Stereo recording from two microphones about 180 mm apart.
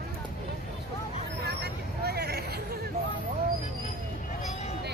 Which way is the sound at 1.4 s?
65° right (ahead or behind).